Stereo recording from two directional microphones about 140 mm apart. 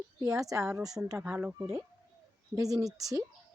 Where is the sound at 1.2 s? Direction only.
10° right (ahead or behind).